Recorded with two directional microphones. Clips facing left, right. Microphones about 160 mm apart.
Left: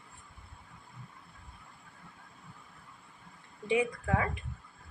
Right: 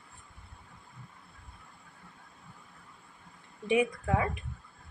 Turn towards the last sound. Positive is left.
turn(degrees=-20)  # may be behind; listen again after turning